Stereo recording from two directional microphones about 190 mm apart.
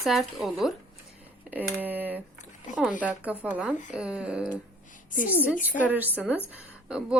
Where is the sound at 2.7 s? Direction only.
40° left (ahead or behind).